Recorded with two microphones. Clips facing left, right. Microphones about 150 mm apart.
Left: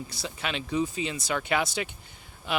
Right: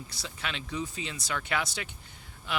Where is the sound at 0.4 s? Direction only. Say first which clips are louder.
Left 7 dB; 15° left (ahead or behind).